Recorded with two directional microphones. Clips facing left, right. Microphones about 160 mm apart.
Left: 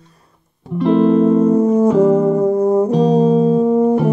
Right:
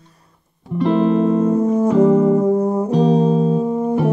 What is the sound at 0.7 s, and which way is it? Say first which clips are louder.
Music: left 3 dB; centre (ahead or behind).